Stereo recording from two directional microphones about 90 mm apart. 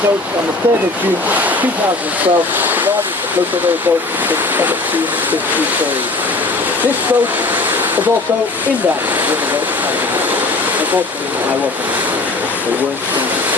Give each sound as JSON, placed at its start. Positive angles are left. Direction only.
{"t": 2.2, "sound": "speech", "side_deg": -20}
{"t": 4.3, "sound": "waves", "side_deg": -20}